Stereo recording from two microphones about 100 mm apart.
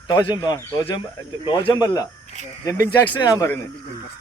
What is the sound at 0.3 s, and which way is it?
Speech, 35° left (ahead or behind).